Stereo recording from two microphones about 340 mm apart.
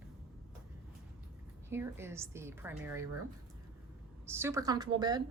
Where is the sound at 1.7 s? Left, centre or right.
Centre.